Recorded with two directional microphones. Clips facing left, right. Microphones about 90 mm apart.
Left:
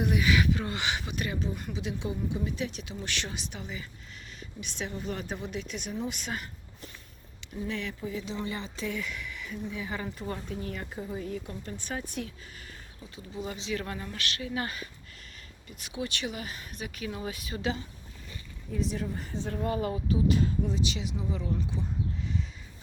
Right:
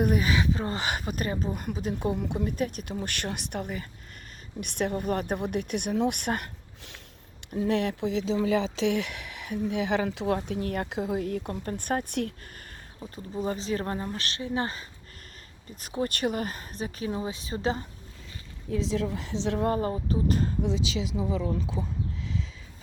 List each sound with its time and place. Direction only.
0.0 s speech: 40° right (ahead or behind)
2.1 s speech: 55° right (ahead or behind); by 7.0 s 75° right (ahead or behind)
7.4 s speech: 60° right (ahead or behind)
13.0 s speech: 40° right (ahead or behind)
15.7 s speech: 40° right (ahead or behind)
18.7 s a woman's voice: 90° right
19.6 s speech: 40° right (ahead or behind)